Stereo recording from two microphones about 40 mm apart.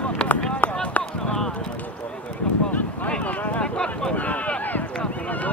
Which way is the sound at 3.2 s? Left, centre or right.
Left.